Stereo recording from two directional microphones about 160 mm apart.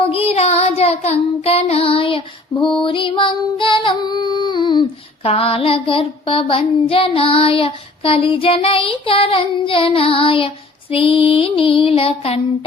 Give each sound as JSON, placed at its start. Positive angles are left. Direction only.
{"t": 0.0, "sound": "child singing", "side_deg": 35}